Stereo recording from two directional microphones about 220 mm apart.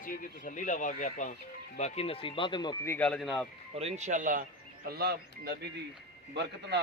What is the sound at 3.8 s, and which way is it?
Speech, 30° right (ahead or behind).